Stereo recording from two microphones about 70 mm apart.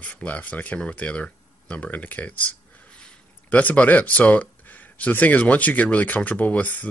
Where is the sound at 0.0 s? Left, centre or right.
Left.